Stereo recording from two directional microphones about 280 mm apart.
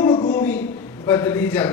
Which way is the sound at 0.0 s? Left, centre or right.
Centre.